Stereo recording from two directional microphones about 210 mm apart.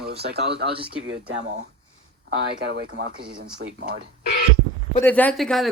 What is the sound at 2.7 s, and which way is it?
Speech, 50° right (ahead or behind).